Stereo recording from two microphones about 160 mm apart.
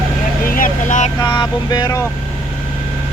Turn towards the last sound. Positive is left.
turn(degrees=25)  # may be behind; listen again after turning